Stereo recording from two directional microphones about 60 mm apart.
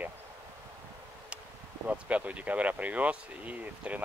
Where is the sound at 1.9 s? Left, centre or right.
Right.